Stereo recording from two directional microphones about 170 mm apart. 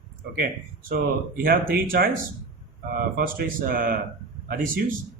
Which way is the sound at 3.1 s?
60° right (ahead or behind).